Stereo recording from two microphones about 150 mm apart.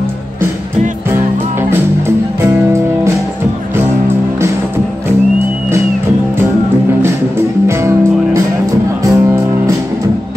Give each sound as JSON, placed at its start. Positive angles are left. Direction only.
{"t": 1.7, "sound": "music", "side_deg": -15}
{"t": 7.0, "sound": "music", "side_deg": -15}